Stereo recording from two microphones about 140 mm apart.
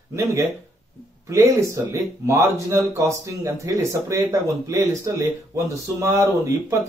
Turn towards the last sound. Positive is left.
turn(degrees=-20)  # may be behind; listen again after turning